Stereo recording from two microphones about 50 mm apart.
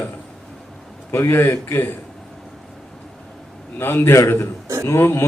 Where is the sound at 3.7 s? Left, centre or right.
Left.